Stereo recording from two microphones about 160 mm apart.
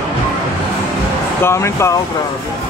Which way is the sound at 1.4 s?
15° left (ahead or behind).